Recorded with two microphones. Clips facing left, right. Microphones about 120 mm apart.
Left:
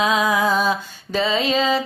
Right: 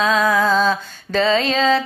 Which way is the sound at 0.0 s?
15° left (ahead or behind).